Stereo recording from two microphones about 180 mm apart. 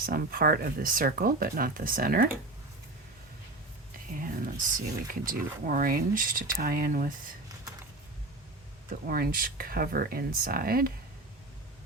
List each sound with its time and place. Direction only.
0.0 s speech: 55° right (ahead or behind)
4.1 s whispering: 50° right (ahead or behind)
5.2 s speech: 50° right (ahead or behind)
8.9 s speech: 55° right (ahead or behind)